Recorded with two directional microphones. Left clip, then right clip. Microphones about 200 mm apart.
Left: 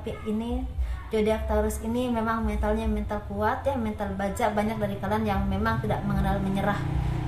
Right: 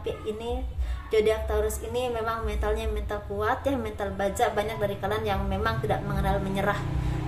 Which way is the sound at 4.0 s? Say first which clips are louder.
Right 2 dB; 45° right (ahead or behind).